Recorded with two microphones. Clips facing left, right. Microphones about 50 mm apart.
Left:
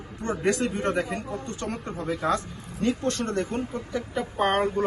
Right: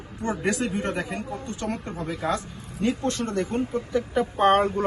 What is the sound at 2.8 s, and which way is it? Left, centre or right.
Speech, right.